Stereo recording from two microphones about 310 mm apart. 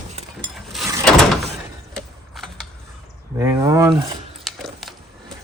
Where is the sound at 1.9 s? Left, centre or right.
Centre.